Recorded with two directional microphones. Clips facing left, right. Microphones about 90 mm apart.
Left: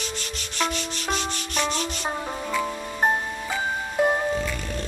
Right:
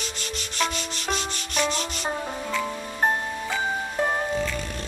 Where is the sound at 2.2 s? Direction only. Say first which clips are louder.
Left 1 dB; 10° left (ahead or behind).